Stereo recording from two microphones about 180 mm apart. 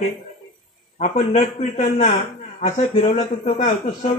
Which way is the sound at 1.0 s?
40° left (ahead or behind).